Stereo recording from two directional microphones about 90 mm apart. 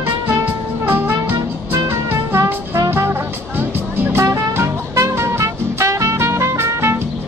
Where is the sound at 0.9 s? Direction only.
25° right (ahead or behind).